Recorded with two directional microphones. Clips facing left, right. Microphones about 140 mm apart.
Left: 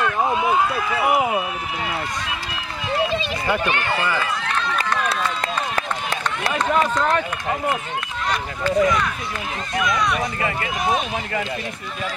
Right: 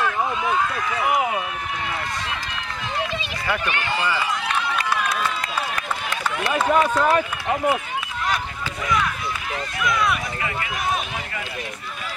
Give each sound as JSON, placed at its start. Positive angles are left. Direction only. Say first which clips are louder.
{"t": 0.2, "sound": "speech", "louder": "left 3 dB", "side_deg": 30}
{"t": 3.4, "sound": "speech", "louder": "left 2 dB", "side_deg": 30}
{"t": 4.0, "sound": "run", "louder": "left 1 dB", "side_deg": -10}
{"t": 6.6, "sound": "speech", "louder": "right 1 dB", "side_deg": -5}
{"t": 8.3, "sound": "speech", "louder": "left 6 dB", "side_deg": -5}